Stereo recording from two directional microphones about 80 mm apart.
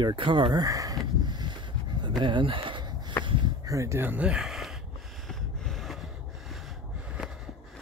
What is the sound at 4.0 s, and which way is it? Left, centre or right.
Speech, right.